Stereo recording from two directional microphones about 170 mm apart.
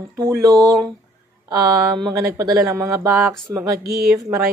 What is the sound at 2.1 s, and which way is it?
Speech, 20° right (ahead or behind).